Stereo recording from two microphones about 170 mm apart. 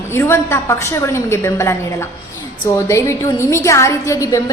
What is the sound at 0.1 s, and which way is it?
A woman's voice, 15° left (ahead or behind).